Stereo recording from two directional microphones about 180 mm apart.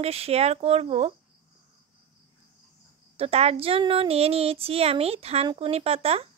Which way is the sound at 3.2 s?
35° right (ahead or behind).